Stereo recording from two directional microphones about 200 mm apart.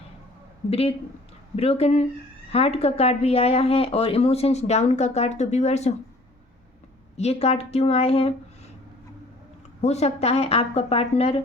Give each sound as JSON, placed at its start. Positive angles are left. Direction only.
{"t": 0.7, "sound": "a man's voice", "side_deg": 30}
{"t": 7.2, "sound": "speech", "side_deg": 30}
{"t": 9.8, "sound": "speech", "side_deg": 35}